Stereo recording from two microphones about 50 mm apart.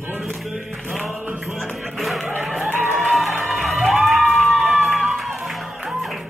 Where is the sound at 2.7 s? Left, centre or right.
Right.